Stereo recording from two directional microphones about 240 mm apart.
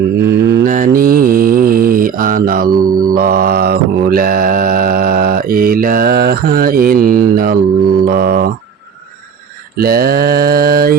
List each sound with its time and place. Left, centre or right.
0.6 s mantra: right
9.7 s mantra: right